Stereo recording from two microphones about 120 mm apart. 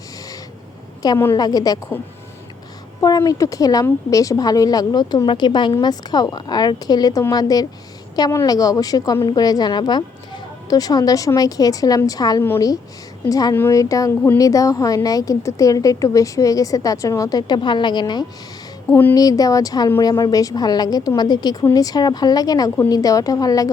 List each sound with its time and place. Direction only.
1.2 s speech: 30° left (ahead or behind)
3.0 s a woman's voice: 30° left (ahead or behind)
18.9 s speech: 15° left (ahead or behind)
19.1 s speech: 30° left (ahead or behind)